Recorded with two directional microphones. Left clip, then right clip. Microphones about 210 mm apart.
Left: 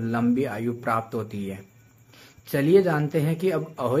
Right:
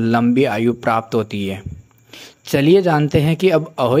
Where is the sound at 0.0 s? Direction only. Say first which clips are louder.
Right 10 dB; 35° right (ahead or behind).